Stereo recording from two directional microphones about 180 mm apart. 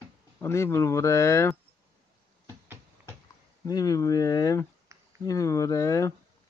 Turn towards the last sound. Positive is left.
turn(degrees=20)  # may be behind; listen again after turning